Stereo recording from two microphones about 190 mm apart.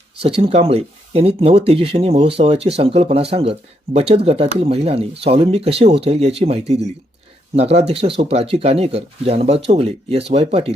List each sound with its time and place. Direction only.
0.2 s speech: 30° right (ahead or behind)